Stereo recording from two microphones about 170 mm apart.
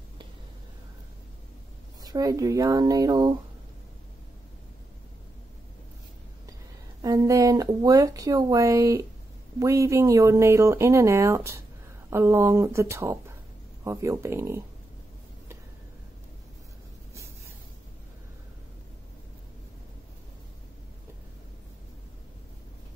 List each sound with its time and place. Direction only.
2.0 s speech: 20° right (ahead or behind)
7.0 s speech: 20° right (ahead or behind)